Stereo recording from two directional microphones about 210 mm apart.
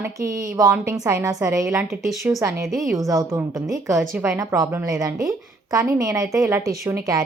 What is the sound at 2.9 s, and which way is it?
A woman's voice, 15° right (ahead or behind).